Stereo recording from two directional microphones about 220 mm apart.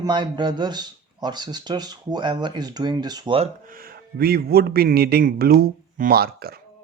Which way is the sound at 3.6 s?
40° right (ahead or behind).